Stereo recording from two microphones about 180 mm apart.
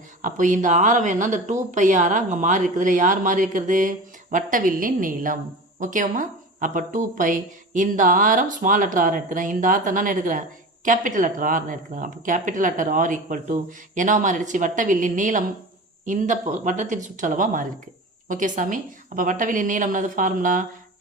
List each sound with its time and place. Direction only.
0.2 s a woman's voice: 45° right (ahead or behind)